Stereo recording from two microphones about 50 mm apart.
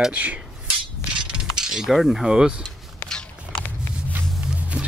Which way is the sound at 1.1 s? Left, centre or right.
Centre.